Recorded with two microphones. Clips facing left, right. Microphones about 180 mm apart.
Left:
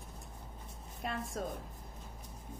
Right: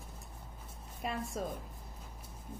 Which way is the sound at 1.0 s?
Centre (ahead or behind).